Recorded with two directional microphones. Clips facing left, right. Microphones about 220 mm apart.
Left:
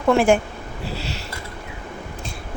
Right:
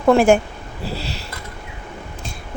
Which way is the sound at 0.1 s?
35° right (ahead or behind).